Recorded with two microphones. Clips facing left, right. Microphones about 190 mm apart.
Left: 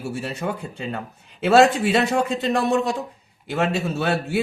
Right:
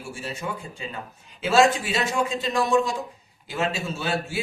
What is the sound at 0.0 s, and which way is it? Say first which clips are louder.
Speech: left 6 dB; 65° left (ahead or behind).